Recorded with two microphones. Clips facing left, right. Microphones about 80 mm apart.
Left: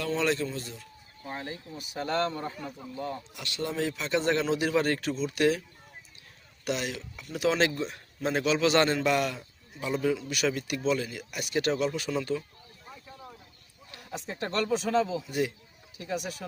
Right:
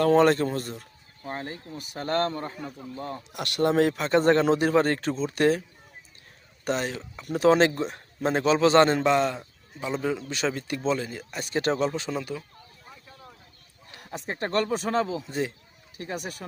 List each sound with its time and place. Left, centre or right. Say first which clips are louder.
0.0 s speech: right 9 dB; right
2.6 s speech: right 2 dB; centre
3.3 s speech: right 12 dB; right
6.7 s a man's voice: right 4 dB; right; by 12.4 s centre
14.0 s speech: right 3 dB; right
15.3 s speech: even; right
16.0 s speech: even; right